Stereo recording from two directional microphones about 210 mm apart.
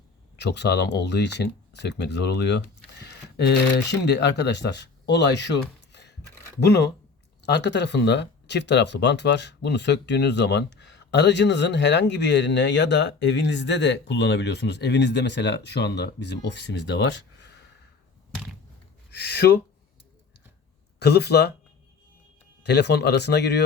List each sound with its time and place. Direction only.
0.3 s speech: 55° left (ahead or behind)
5.9 s a sound: 55° left (ahead or behind)
6.6 s speech: 50° left (ahead or behind)
19.1 s speech: 50° left (ahead or behind)
21.0 s speech: 50° left (ahead or behind)
22.6 s speech: 50° left (ahead or behind)